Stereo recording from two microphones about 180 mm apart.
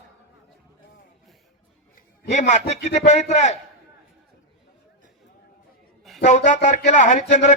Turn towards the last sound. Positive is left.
turn(degrees=40)  # may be behind; listen again after turning